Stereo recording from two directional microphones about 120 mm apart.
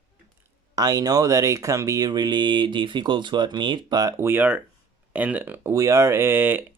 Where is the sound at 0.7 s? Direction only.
30° right (ahead or behind).